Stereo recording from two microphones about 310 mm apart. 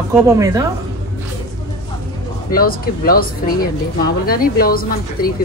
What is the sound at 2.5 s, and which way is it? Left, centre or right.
Speech, left.